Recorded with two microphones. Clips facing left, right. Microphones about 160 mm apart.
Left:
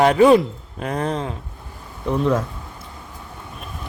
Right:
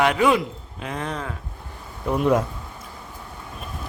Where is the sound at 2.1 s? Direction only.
15° right (ahead or behind).